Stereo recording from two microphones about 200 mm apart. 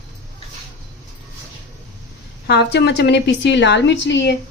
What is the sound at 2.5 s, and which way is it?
A woman's voice, 60° left (ahead or behind).